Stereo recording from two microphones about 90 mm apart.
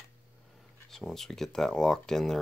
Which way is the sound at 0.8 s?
5° left (ahead or behind).